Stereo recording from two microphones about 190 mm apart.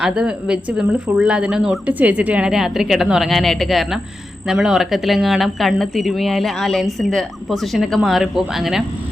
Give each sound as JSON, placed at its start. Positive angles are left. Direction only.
{"t": 0.0, "sound": "speech", "side_deg": -5}